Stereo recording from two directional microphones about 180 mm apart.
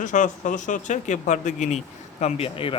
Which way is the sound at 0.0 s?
45° left (ahead or behind).